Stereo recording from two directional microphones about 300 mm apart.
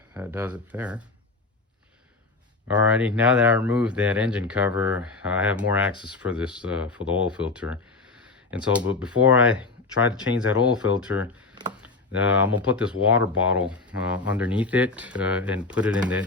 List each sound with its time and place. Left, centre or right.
0.1 s speech: centre
2.6 s speech: centre